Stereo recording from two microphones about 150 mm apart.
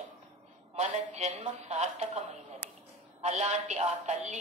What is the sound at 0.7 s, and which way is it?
A woman's voice, 50° right (ahead or behind).